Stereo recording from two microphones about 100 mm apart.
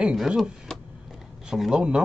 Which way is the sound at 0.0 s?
5° right (ahead or behind).